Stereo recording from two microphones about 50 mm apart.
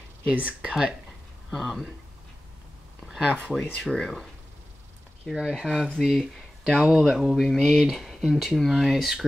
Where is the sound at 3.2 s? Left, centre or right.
Left.